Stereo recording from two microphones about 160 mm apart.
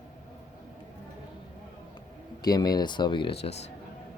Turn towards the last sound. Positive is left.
turn(degrees=40)  # may be behind; listen again after turning